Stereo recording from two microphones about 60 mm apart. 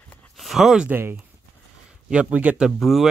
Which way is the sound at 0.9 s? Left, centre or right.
Right.